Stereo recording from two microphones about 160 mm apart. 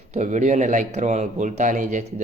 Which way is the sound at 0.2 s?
50° right (ahead or behind).